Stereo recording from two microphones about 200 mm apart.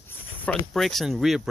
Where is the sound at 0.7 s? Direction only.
Centre (ahead or behind).